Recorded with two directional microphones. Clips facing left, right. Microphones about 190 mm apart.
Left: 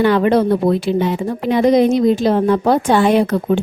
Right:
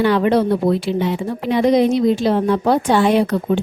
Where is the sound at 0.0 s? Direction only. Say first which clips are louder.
Left 2 dB; 50° left (ahead or behind).